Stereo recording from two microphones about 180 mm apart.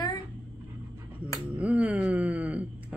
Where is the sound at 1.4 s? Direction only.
5° right (ahead or behind).